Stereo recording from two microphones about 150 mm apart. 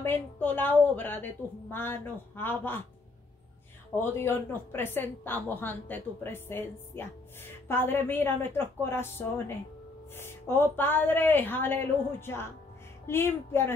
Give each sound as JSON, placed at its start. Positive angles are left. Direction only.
{"t": 0.0, "sound": "a woman's voice", "side_deg": 15}
{"t": 3.9, "sound": "a woman's voice", "side_deg": 15}
{"t": 10.1, "sound": "a woman's voice", "side_deg": 15}